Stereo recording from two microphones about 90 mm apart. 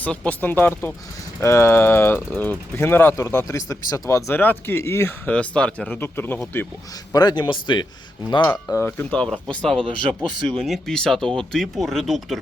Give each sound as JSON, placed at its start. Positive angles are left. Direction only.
{"t": 0.0, "sound": "speech", "side_deg": 15}
{"t": 3.2, "sound": "speech", "side_deg": 35}
{"t": 4.4, "sound": "speech", "side_deg": 25}
{"t": 5.3, "sound": "speech", "side_deg": 15}
{"t": 6.0, "sound": "speech", "side_deg": 25}
{"t": 7.1, "sound": "speech", "side_deg": 50}
{"t": 8.7, "sound": "speech", "side_deg": 25}